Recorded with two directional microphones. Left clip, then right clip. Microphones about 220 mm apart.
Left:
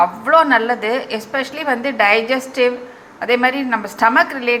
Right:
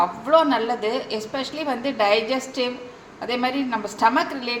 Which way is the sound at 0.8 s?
35° left (ahead or behind).